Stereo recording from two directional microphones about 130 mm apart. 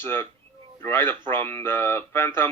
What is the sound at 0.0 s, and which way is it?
A man's voice, 20° left (ahead or behind).